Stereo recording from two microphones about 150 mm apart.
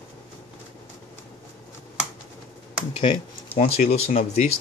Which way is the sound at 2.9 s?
40° left (ahead or behind).